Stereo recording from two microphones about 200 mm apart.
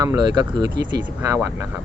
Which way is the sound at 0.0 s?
20° right (ahead or behind).